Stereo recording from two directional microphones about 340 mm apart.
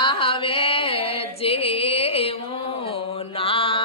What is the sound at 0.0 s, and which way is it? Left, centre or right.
Music, centre.